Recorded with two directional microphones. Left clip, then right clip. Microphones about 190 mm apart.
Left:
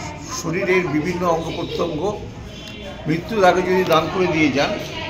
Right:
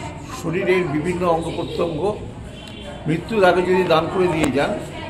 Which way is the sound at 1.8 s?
10° right (ahead or behind).